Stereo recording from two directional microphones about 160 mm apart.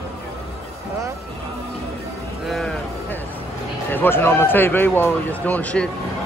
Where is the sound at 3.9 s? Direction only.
15° left (ahead or behind).